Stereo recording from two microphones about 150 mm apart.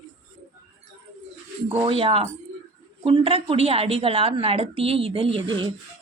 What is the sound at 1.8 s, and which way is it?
A woman's voice, 40° right (ahead or behind).